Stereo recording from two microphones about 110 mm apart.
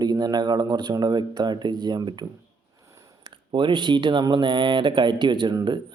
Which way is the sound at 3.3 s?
45° right (ahead or behind).